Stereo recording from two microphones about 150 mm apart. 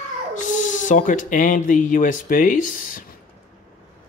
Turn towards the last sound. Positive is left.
turn(degrees=60)  # may be behind; listen again after turning